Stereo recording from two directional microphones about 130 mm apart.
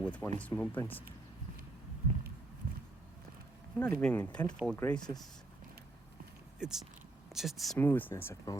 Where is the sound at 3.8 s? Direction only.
10° left (ahead or behind).